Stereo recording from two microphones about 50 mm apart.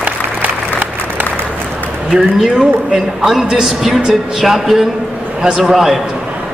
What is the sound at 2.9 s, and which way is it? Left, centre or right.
A man's voice, centre.